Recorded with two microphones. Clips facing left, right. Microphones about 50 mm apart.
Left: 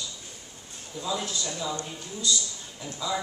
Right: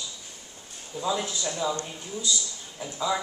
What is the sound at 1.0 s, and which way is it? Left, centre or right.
A man's voice, right.